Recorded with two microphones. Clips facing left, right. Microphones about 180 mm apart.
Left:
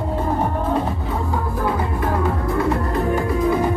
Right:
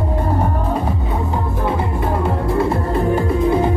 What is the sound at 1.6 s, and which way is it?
Music, 25° right (ahead or behind).